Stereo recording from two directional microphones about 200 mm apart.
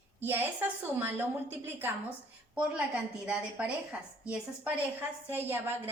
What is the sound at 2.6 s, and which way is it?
A woman's voice, 5° right (ahead or behind).